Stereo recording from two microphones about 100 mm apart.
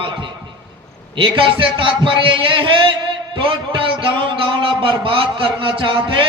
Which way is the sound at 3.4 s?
60° right (ahead or behind).